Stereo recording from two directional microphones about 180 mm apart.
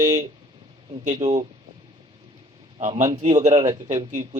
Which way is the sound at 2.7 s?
40° right (ahead or behind).